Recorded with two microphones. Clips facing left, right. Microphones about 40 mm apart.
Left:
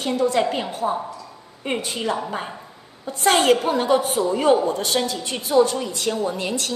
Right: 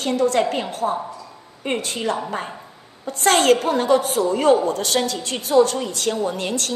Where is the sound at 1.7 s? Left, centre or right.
Right.